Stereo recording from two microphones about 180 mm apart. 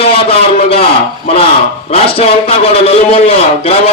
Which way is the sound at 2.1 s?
35° left (ahead or behind).